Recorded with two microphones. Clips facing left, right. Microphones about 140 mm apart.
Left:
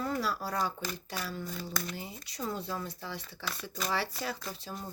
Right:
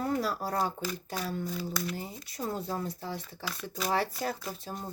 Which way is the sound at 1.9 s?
45° right (ahead or behind).